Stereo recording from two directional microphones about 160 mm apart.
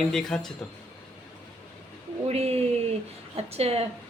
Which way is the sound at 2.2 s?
40° right (ahead or behind).